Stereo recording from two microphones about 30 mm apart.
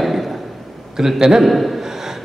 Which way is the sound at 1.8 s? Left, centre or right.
Centre.